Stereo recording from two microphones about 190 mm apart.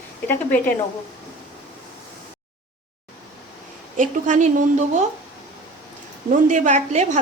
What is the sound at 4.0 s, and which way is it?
Speech, 40° right (ahead or behind).